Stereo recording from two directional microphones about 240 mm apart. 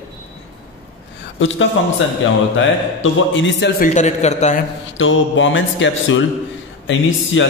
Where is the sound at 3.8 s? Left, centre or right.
Left.